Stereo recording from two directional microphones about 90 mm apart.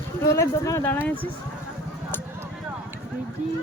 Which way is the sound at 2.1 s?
25° left (ahead or behind).